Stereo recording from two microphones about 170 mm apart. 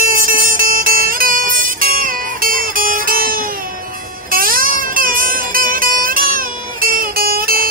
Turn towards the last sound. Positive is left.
turn(degrees=-60)  # may be behind; listen again after turning